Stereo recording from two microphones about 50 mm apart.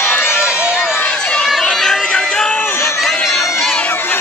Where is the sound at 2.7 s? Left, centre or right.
Left.